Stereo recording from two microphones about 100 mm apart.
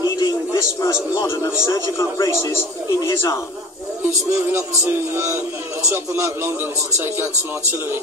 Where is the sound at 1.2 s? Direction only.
30° left (ahead or behind).